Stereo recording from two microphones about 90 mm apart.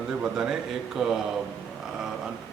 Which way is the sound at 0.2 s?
5° right (ahead or behind).